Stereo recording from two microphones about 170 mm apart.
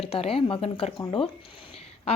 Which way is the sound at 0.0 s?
35° left (ahead or behind).